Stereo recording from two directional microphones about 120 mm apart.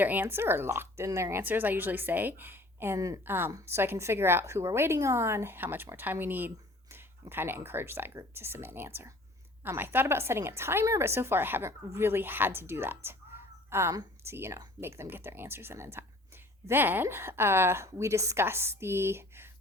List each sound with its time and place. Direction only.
0.0 s speech: 15° right (ahead or behind)